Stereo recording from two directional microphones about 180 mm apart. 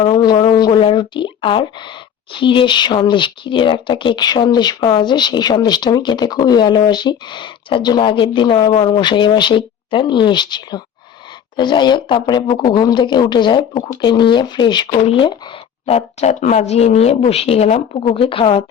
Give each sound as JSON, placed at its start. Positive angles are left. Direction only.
{"t": 0.0, "sound": "a woman's voice", "side_deg": 25}